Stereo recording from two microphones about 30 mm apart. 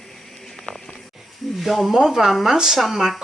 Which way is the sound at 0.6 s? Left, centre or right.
Centre.